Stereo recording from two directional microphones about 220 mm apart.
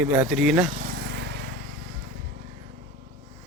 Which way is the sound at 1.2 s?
50° right (ahead or behind).